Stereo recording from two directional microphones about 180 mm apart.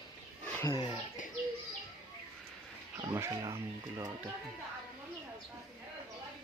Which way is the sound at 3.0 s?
15° right (ahead or behind).